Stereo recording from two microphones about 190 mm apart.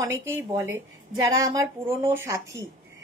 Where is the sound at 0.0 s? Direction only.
15° right (ahead or behind).